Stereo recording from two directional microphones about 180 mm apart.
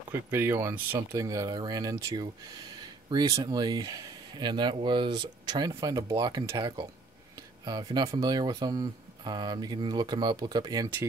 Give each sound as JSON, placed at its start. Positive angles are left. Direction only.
{"t": 0.1, "sound": "speech", "side_deg": -10}